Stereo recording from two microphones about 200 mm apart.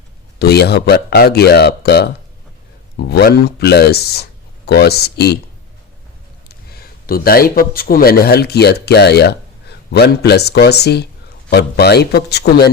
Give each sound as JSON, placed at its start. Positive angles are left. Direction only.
{"t": 0.3, "sound": "speech", "side_deg": 55}
{"t": 6.5, "sound": "a man's voice", "side_deg": 50}